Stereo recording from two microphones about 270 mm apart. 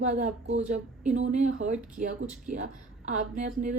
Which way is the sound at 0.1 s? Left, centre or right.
Right.